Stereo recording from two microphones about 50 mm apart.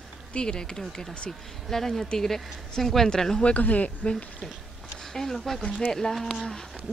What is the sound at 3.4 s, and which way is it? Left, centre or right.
Speech, left.